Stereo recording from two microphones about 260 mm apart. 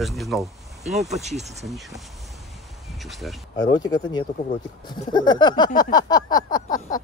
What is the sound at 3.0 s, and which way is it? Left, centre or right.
Speech, centre.